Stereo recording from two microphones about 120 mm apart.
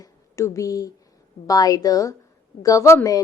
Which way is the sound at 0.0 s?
25° left (ahead or behind).